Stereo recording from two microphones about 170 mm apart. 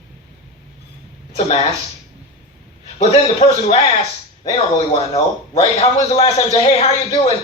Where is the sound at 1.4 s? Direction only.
40° left (ahead or behind).